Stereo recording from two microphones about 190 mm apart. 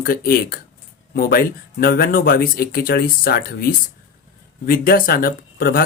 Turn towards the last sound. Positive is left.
turn(degrees=50)  # may be behind; listen again after turning